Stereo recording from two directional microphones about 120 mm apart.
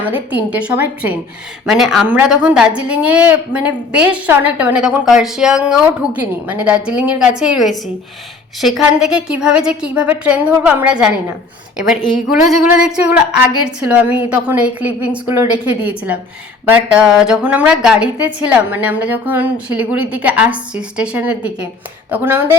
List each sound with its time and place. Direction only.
0.0 s a woman's voice: 15° right (ahead or behind)